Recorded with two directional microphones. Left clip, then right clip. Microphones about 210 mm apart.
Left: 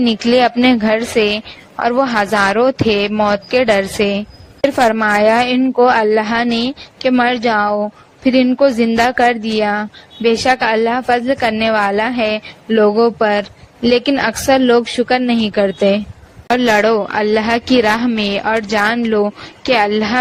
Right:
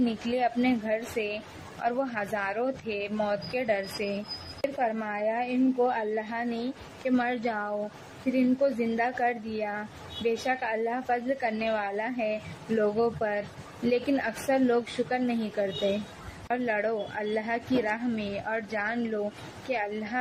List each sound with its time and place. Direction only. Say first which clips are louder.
0.0 s a woman's voice: left 15 dB; 50° left (ahead or behind)